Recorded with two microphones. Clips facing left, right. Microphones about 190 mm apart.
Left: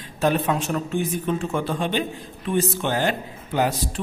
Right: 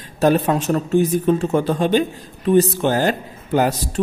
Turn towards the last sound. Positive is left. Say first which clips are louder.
# right 5 dB
turn(degrees=-45)  # may be behind; listen again after turning